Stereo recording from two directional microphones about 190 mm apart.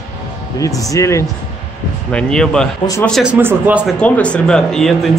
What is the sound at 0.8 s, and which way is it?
Speech, 15° left (ahead or behind).